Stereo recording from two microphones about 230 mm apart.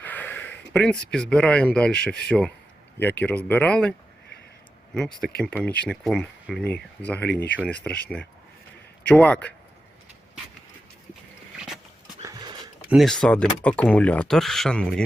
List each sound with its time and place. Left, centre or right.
0.0 s speech: centre
4.9 s speech: centre
11.5 s vehicle: centre
12.2 s a sound: centre
12.9 s speech: centre